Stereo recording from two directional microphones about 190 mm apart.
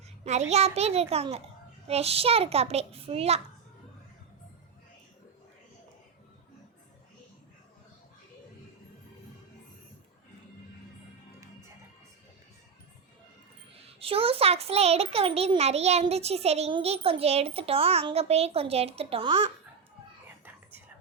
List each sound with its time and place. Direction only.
0.3 s a child's voice: 35° right (ahead or behind)
13.8 s a child's voice: 30° right (ahead or behind)
20.4 s whispering: 10° right (ahead or behind)